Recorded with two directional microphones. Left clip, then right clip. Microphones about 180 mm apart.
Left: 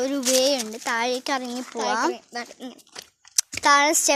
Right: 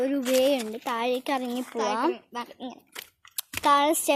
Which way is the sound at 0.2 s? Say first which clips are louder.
Left 3 dB; 50° left (ahead or behind).